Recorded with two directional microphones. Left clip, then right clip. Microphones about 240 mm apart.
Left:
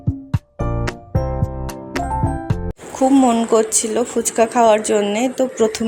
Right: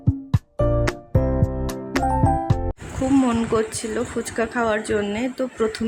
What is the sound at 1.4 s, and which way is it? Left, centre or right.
Music, centre.